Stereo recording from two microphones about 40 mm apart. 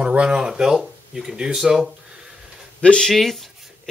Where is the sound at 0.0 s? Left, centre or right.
Right.